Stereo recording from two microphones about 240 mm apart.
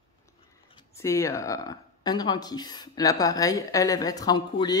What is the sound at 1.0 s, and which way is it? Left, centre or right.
Speech, centre.